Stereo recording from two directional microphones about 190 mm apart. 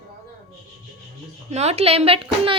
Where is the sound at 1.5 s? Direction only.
35° right (ahead or behind).